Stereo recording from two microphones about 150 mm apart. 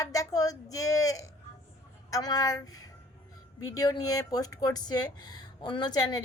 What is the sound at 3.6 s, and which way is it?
Speech, 25° left (ahead or behind).